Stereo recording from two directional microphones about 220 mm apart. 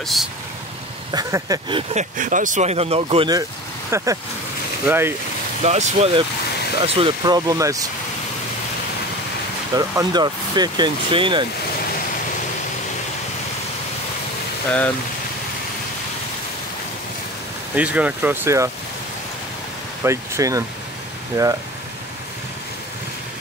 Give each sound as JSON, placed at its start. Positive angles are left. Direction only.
{"t": 0.0, "sound": "speech", "side_deg": 0}
{"t": 1.1, "sound": "speech", "side_deg": -15}
{"t": 2.1, "sound": "speech", "side_deg": -35}
{"t": 5.6, "sound": "speech", "side_deg": -30}
{"t": 9.8, "sound": "speech", "side_deg": -20}
{"t": 17.7, "sound": "speech", "side_deg": -5}
{"t": 20.0, "sound": "speech", "side_deg": -15}